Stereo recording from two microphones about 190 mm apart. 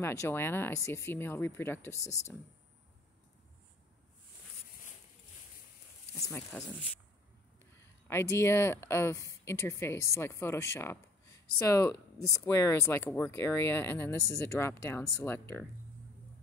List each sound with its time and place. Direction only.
0.0 s speech: 15° left (ahead or behind)
6.1 s speech: 15° left (ahead or behind)
8.1 s speech: 15° left (ahead or behind)
14.1 s speech: 15° right (ahead or behind)
14.4 s speech: 10° left (ahead or behind)